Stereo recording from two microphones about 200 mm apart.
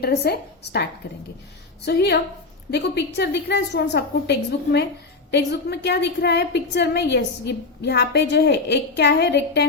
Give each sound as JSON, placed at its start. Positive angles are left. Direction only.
{"t": 0.0, "sound": "a woman's voice", "side_deg": 50}